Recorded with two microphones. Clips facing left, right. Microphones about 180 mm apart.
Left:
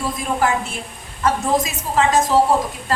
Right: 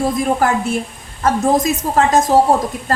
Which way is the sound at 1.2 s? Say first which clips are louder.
Right 4 dB; 40° right (ahead or behind).